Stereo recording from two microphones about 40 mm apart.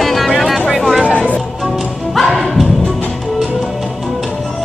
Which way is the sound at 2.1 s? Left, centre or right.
Centre.